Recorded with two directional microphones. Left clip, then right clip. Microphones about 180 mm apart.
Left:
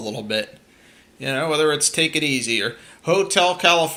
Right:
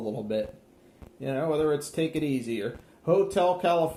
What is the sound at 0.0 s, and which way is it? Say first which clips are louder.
Speech: left 4 dB; 45° left (ahead or behind).